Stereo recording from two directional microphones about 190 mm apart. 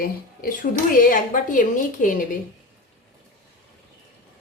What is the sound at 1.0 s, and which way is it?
Speech, 45° left (ahead or behind).